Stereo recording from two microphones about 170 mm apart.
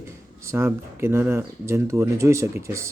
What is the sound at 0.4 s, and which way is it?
Speech, 15° right (ahead or behind).